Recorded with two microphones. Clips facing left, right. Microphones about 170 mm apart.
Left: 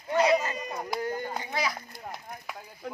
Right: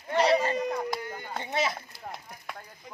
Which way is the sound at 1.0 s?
40° left (ahead or behind).